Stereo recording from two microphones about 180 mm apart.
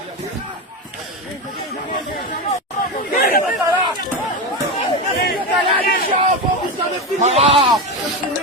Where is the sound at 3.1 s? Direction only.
50° left (ahead or behind).